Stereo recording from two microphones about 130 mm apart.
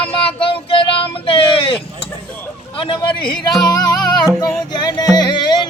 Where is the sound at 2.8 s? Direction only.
40° left (ahead or behind).